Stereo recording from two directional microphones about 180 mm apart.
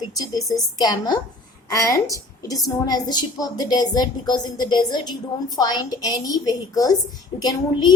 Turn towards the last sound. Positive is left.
turn(degrees=25)  # may be behind; listen again after turning